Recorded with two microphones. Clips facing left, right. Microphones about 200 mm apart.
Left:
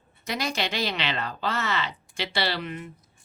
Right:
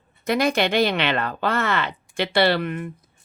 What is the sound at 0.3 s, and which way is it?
Speech, 55° right (ahead or behind).